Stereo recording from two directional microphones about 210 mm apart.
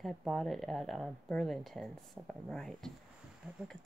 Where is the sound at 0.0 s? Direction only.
Centre (ahead or behind).